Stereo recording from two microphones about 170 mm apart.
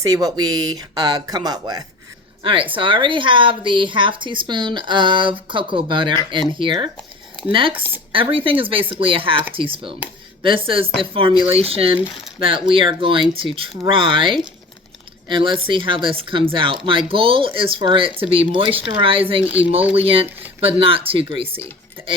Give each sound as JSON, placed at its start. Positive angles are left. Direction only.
{"t": 0.0, "sound": "a woman's voice", "side_deg": -20}
{"t": 7.7, "sound": "speech", "side_deg": -10}
{"t": 8.1, "sound": "a woman's voice", "side_deg": -30}